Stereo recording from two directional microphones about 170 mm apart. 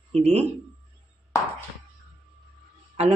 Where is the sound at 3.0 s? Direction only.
40° right (ahead or behind).